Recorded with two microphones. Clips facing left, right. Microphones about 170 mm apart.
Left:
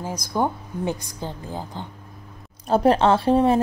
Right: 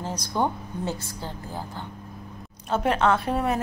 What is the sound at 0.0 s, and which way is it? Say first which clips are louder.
A woman's voice: left 2 dB; 10° left (ahead or behind).